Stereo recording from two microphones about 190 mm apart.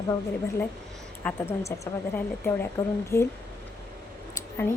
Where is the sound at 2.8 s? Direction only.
20° left (ahead or behind).